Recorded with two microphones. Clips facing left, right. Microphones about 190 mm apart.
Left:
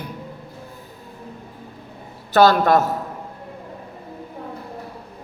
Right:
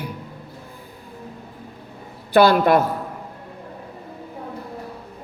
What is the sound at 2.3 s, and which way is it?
Speech, 45° left (ahead or behind).